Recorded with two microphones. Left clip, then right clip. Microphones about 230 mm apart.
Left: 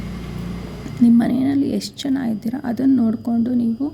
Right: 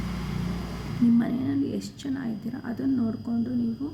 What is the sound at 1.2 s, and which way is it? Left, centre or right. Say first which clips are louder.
Speech: left 9 dB; left.